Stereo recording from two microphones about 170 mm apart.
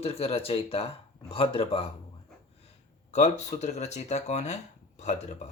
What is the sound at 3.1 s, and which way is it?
Speech, 40° left (ahead or behind).